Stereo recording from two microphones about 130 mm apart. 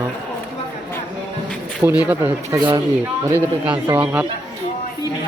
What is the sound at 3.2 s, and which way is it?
Speech, 15° right (ahead or behind).